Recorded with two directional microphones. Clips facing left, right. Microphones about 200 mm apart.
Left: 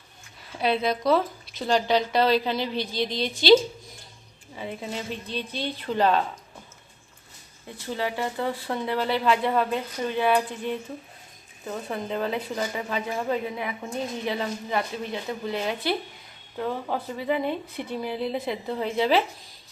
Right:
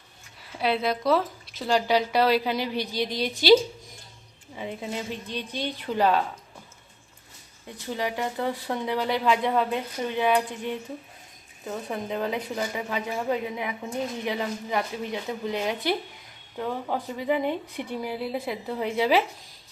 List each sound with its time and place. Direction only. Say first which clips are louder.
0.6 s a woman's voice: left 1 dB; 5° right (ahead or behind)
4.8 s a woman's voice: right 1 dB; 15° right (ahead or behind)
7.9 s a woman's voice: even; 15° right (ahead or behind)